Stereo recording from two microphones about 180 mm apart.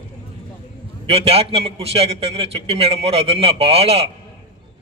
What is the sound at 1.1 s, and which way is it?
A man's voice, 30° right (ahead or behind).